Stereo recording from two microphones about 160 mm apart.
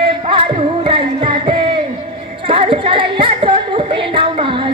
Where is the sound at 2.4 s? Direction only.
35° right (ahead or behind).